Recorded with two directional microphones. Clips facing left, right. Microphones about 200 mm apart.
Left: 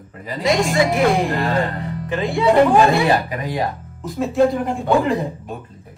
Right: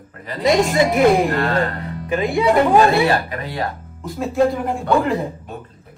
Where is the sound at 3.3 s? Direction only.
15° left (ahead or behind).